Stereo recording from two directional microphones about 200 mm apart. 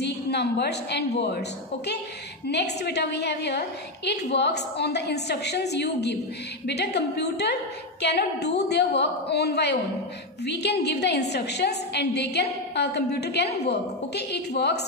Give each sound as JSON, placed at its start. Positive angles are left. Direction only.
{"t": 0.0, "sound": "a woman's voice", "side_deg": 55}
{"t": 2.4, "sound": "a woman's voice", "side_deg": 55}